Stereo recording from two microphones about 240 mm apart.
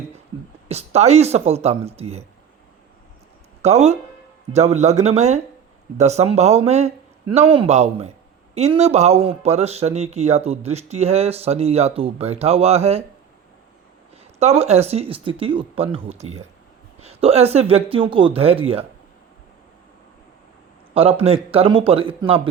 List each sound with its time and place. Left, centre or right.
0.7 s speech: right
3.6 s speech: right
14.3 s speech: right
20.9 s speech: right